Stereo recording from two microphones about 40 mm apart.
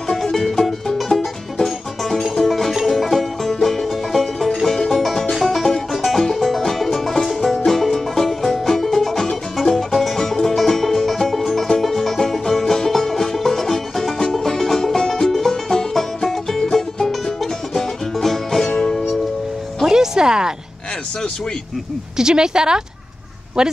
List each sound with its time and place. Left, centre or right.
0.1 s music: centre
16.7 s music: centre
19.9 s music: centre
22.1 s speech: centre